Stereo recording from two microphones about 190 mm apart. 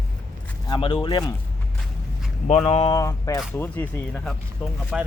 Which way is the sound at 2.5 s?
35° left (ahead or behind).